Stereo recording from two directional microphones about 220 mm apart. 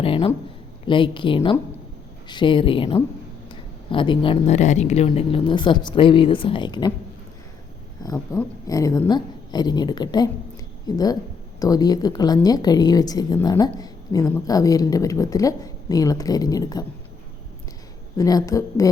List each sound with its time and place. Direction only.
0.0 s speech: 25° left (ahead or behind)
8.0 s a woman's voice: 15° left (ahead or behind)
18.2 s a woman's voice: 15° left (ahead or behind)